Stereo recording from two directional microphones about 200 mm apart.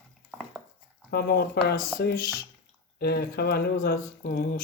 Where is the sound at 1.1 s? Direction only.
50° left (ahead or behind).